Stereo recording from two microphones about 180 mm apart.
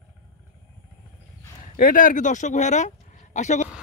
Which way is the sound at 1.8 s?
50° left (ahead or behind).